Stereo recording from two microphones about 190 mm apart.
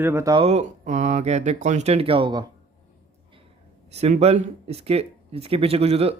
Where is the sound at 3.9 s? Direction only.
35° right (ahead or behind).